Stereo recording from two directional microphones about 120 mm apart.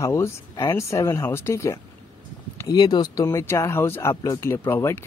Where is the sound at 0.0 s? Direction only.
25° left (ahead or behind).